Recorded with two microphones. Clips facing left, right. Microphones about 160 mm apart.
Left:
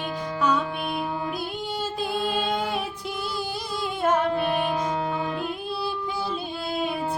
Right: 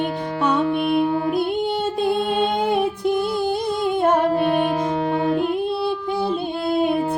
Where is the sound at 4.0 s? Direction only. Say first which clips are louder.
Right 4 dB; 50° right (ahead or behind).